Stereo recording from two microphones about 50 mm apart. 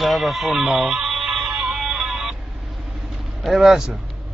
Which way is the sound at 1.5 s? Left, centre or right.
Centre.